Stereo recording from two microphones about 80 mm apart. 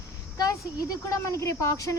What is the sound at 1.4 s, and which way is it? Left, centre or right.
Speech, left.